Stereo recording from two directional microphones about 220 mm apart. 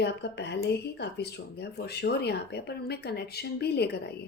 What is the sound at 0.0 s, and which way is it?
A woman's voice, 50° left (ahead or behind).